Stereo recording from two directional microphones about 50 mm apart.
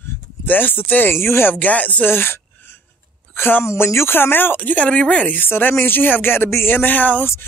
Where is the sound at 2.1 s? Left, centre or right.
Left.